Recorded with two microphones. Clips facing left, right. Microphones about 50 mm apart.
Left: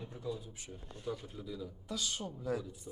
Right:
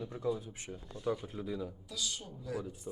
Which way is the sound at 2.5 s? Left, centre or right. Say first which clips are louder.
Right 2 dB; right.